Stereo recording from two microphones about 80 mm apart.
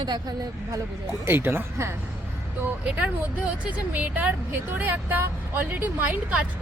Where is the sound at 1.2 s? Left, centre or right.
Right.